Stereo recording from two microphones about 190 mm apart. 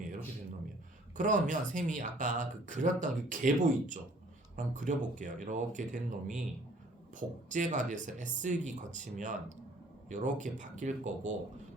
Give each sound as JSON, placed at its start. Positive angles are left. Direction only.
{"t": 1.1, "sound": "speech", "side_deg": -40}